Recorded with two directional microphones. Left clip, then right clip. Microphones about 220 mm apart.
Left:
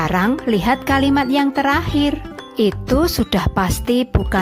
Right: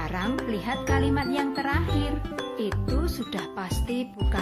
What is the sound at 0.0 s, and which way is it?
Speech, 45° left (ahead or behind).